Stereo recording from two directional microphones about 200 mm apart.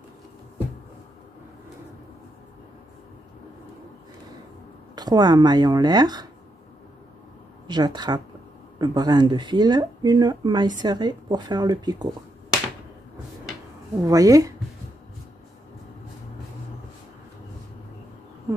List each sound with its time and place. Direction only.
4.9 s speech: 20° right (ahead or behind)
7.6 s speech: 20° right (ahead or behind)
14.0 s speech: 15° right (ahead or behind)